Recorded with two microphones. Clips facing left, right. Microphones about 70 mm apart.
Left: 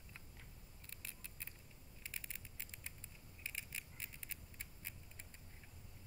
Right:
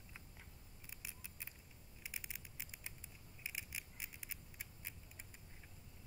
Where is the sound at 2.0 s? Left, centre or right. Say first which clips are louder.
Right 1 dB; centre.